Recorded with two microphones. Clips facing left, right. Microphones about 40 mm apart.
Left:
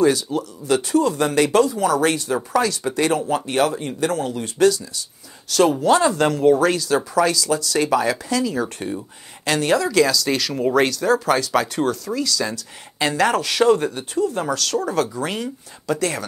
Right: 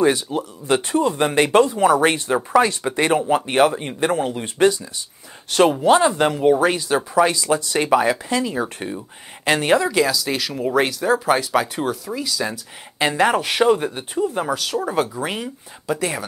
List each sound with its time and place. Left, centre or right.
0.0 s speech: right
5.8 s speech: right